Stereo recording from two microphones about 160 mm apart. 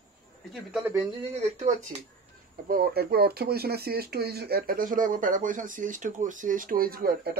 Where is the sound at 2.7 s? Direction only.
75° right (ahead or behind).